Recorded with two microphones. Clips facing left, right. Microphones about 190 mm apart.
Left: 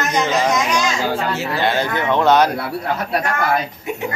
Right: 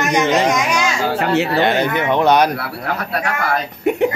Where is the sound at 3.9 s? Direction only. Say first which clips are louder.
Right 9 dB; 60° right (ahead or behind).